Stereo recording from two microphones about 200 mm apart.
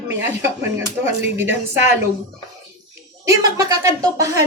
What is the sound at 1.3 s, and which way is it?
Speech, 10° right (ahead or behind).